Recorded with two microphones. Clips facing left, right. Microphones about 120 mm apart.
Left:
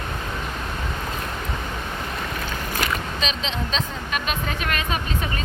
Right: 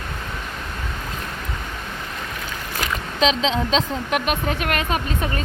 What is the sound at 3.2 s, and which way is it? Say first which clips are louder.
Speech: right 8 dB; 90° right.